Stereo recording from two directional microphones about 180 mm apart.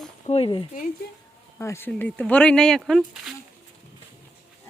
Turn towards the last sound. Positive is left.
turn(degrees=0)  # may be behind; listen again after turning